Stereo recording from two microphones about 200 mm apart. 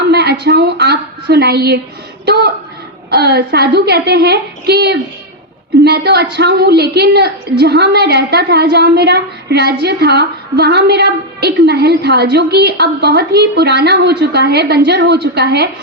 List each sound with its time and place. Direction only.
0.1 s a woman's voice: 55° right (ahead or behind)